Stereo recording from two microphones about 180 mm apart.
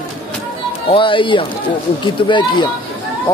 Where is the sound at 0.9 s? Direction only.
30° left (ahead or behind).